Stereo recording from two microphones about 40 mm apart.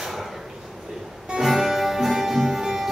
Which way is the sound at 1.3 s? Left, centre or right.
Centre.